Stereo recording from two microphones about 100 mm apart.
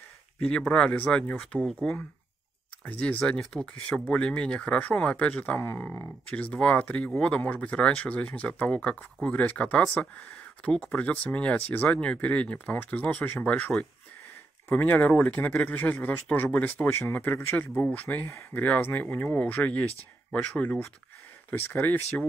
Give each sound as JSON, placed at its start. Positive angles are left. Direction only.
{"t": 0.4, "sound": "speech", "side_deg": 10}
{"t": 14.7, "sound": "speech", "side_deg": 20}